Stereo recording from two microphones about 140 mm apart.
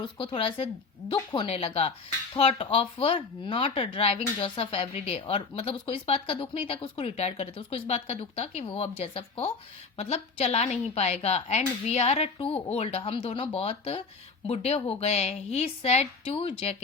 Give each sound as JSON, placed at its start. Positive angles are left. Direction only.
{"t": 0.0, "sound": "speech", "side_deg": 35}
{"t": 1.5, "sound": "speech", "side_deg": 45}